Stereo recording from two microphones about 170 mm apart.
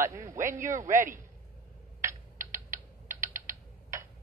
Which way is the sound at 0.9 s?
50° right (ahead or behind).